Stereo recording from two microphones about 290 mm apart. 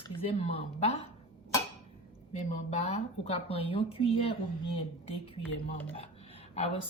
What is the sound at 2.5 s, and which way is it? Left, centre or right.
Speech, left.